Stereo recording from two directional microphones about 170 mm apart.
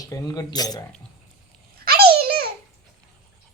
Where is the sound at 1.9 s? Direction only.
65° right (ahead or behind).